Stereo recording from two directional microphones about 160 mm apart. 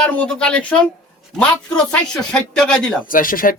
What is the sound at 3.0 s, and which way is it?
Speech, 60° left (ahead or behind).